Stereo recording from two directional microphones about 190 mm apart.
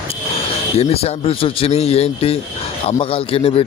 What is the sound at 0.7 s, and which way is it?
A man's voice, 30° left (ahead or behind).